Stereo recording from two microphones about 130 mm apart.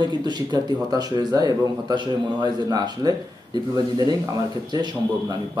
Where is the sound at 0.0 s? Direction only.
35° right (ahead or behind).